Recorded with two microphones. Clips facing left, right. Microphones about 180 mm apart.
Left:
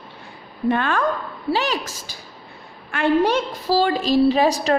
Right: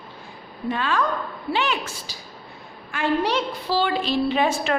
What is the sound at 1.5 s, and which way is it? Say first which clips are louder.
A woman's voice: left 3 dB; 40° left (ahead or behind).